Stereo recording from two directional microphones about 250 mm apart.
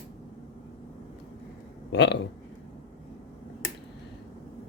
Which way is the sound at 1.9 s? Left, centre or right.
Left.